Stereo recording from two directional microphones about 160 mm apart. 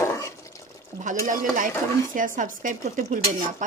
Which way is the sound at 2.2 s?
55° right (ahead or behind).